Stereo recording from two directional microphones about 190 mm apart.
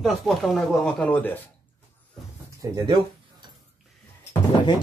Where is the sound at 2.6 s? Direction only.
15° right (ahead or behind).